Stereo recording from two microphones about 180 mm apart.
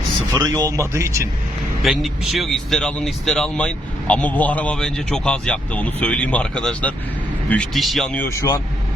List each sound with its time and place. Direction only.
0.2 s speech: 25° right (ahead or behind)
1.8 s speech: centre (ahead or behind)